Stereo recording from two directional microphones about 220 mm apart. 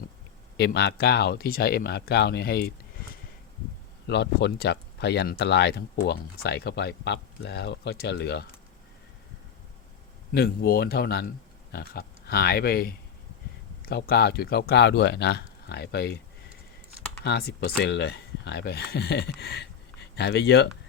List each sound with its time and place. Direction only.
0.5 s speech: 50° left (ahead or behind)
4.0 s speech: 50° left (ahead or behind)
10.3 s speech: 45° left (ahead or behind)
17.2 s speech: 45° left (ahead or behind)